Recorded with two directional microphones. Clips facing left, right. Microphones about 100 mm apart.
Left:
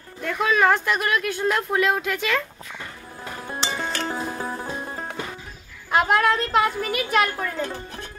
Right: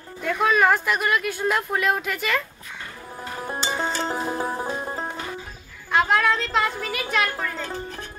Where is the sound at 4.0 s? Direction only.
20° right (ahead or behind).